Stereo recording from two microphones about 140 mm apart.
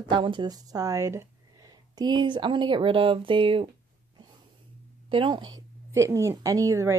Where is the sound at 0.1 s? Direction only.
35° right (ahead or behind).